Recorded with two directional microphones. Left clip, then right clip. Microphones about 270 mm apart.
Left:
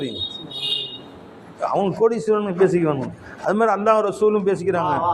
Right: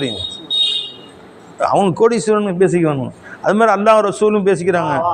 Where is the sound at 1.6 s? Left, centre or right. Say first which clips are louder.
Right 6 dB; right.